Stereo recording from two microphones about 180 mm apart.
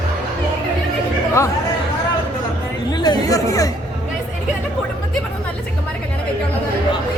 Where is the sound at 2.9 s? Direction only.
20° left (ahead or behind).